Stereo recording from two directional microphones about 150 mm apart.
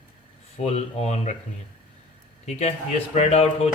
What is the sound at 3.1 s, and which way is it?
Speech, 45° left (ahead or behind).